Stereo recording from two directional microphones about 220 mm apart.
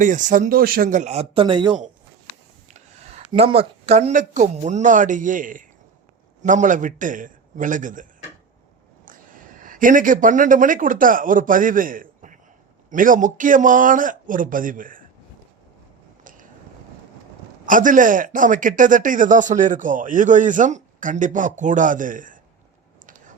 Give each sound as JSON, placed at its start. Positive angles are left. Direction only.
{"t": 0.0, "sound": "a man's voice", "side_deg": -35}
{"t": 3.3, "sound": "a man's voice", "side_deg": -25}
{"t": 9.0, "sound": "a man's voice", "side_deg": -40}
{"t": 17.7, "sound": "a man's voice", "side_deg": -35}